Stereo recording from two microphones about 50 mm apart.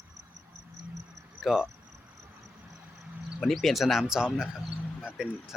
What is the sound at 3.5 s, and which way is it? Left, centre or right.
Speech, centre.